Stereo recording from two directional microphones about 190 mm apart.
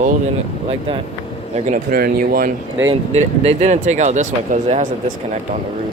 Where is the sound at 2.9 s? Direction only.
35° right (ahead or behind).